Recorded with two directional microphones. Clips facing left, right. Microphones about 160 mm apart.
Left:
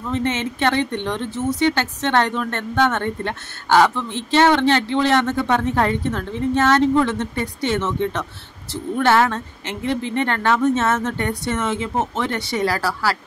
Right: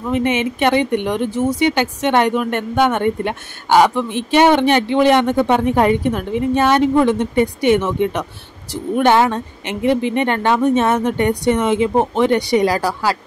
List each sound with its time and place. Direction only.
0.0 s speech: 15° right (ahead or behind)